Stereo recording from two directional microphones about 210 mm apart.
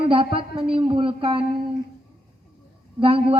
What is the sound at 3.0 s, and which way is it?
Speech, 25° right (ahead or behind).